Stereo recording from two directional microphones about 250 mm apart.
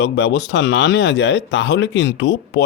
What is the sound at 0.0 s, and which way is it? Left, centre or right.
Speech, left.